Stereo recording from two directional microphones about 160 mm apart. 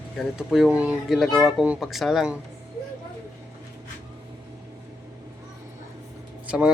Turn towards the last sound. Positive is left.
turn(degrees=-5)  # may be behind; listen again after turning